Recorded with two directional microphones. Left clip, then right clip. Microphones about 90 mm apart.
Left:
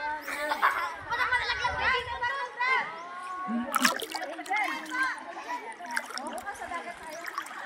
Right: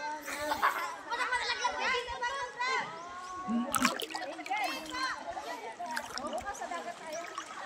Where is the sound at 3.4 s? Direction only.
15° left (ahead or behind).